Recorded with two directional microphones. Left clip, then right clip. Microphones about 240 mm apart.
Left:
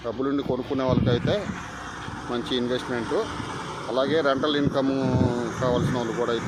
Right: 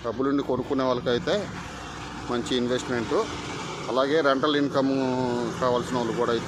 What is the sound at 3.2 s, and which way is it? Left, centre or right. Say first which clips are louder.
Vehicle: even; centre.